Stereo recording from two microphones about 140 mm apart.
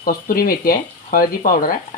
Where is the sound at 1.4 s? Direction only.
80° left.